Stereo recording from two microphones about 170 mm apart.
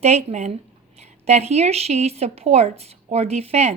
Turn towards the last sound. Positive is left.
turn(degrees=-40)  # may be behind; listen again after turning